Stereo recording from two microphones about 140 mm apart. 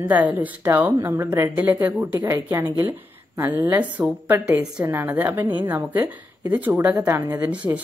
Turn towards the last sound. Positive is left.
turn(degrees=-20)  # may be behind; listen again after turning